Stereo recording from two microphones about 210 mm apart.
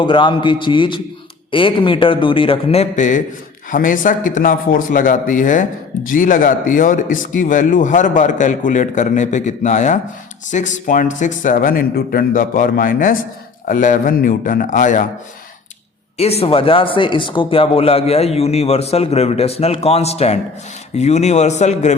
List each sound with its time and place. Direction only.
0.0 s a man's voice: 25° left (ahead or behind)
16.1 s a man's voice: 30° left (ahead or behind)